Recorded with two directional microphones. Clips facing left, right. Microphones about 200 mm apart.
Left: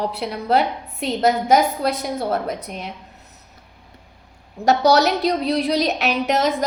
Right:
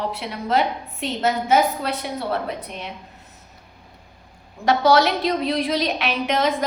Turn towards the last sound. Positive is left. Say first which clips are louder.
# left 2 dB
turn(degrees=40)  # may be behind; listen again after turning